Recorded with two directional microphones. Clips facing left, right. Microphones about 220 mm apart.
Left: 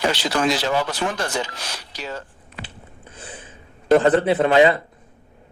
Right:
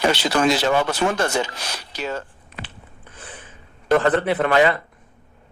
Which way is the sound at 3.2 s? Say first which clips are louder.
Left 2 dB; 25° left (ahead or behind).